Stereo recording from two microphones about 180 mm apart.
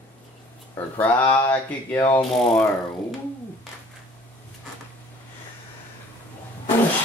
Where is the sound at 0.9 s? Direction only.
10° left (ahead or behind).